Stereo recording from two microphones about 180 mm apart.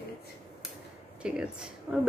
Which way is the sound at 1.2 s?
5° right (ahead or behind).